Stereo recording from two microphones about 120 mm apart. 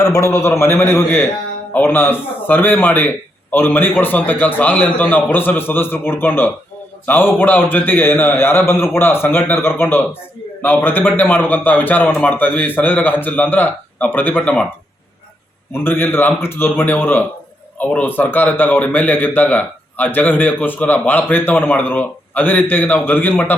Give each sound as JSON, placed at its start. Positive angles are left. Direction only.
{"t": 0.0, "sound": "a man's voice", "side_deg": 25}
{"t": 15.7, "sound": "a man's voice", "side_deg": 20}